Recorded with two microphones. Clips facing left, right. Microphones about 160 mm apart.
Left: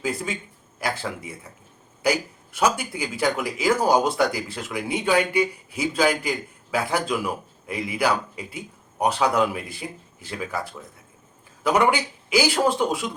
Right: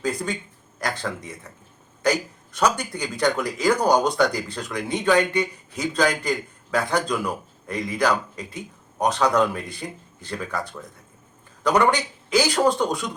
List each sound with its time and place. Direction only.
0.0 s a man's voice: 5° left (ahead or behind)